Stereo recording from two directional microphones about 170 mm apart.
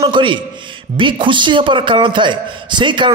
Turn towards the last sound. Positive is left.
turn(degrees=-30)  # may be behind; listen again after turning